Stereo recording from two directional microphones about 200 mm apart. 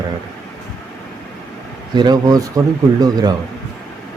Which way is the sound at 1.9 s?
20° right (ahead or behind).